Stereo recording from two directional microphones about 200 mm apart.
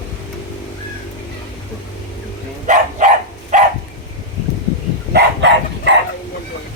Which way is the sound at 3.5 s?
40° right (ahead or behind).